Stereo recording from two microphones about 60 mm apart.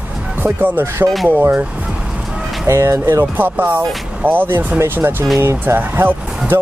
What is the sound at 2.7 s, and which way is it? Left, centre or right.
Speech, right.